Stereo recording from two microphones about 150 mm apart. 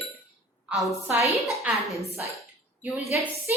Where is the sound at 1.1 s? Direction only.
15° right (ahead or behind).